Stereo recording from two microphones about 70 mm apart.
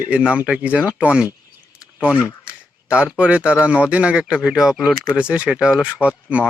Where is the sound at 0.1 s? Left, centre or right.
Centre.